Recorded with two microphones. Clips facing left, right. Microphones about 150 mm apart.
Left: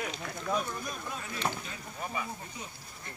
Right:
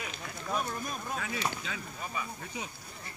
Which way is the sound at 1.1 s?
90° right.